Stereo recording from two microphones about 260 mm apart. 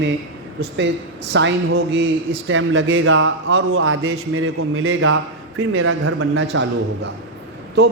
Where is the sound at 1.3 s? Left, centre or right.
Right.